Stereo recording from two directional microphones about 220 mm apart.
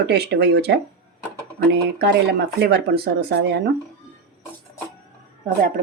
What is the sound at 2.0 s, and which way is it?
Speech, 50° right (ahead or behind).